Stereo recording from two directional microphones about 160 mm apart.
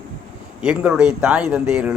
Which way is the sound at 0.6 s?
5° right (ahead or behind).